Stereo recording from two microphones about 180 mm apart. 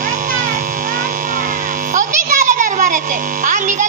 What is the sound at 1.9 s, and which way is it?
Music, 45° right (ahead or behind).